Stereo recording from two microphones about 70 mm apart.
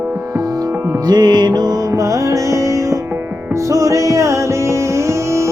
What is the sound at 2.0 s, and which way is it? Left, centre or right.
Music, right.